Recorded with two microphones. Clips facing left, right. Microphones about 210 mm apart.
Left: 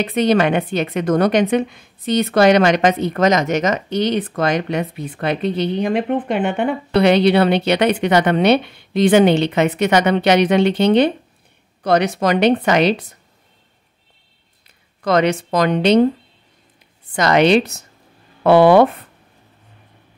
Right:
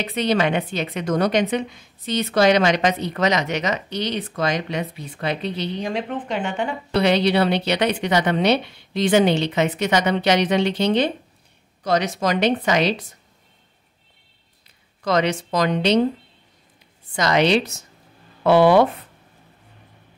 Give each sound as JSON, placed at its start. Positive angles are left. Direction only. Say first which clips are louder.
{"t": 0.0, "sound": "a woman's voice", "louder": "left 5 dB", "side_deg": 55}
{"t": 15.0, "sound": "a woman's voice", "louder": "left 4 dB", "side_deg": 60}
{"t": 17.1, "sound": "a woman's voice", "louder": "left 5 dB", "side_deg": 60}